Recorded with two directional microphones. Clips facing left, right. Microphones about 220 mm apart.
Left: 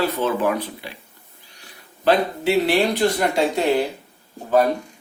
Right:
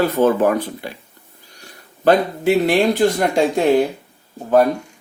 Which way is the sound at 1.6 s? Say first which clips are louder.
Right 3 dB; 45° right (ahead or behind).